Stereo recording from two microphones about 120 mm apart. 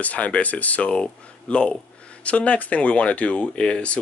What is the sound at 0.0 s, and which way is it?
Speech, 10° left (ahead or behind).